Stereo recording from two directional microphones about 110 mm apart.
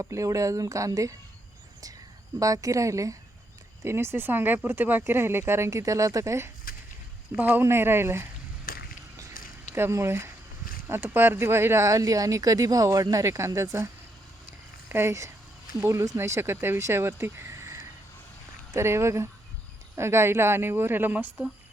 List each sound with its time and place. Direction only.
0.0 s speech: 30° right (ahead or behind)
2.4 s speech: 30° right (ahead or behind)
9.7 s speech: 25° right (ahead or behind)